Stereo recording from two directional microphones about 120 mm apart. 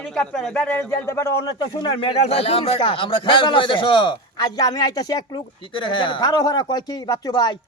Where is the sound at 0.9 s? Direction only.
25° left (ahead or behind).